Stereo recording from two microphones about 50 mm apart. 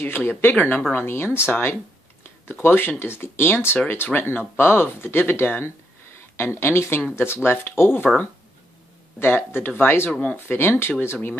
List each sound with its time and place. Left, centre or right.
0.0 s speech: left
0.9 s speech: left
4.1 s speech: left
9.2 s speech: left